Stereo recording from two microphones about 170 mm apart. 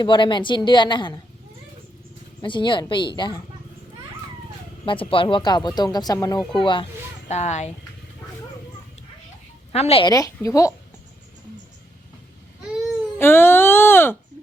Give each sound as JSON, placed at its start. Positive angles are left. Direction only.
{"t": 0.0, "sound": "speech", "side_deg": 25}
{"t": 2.4, "sound": "speech", "side_deg": 30}
{"t": 4.9, "sound": "speech", "side_deg": 30}
{"t": 7.3, "sound": "speech", "side_deg": 45}
{"t": 9.7, "sound": "a woman's voice", "side_deg": 35}
{"t": 10.1, "sound": "speech", "side_deg": 20}
{"t": 13.1, "sound": "speech", "side_deg": 15}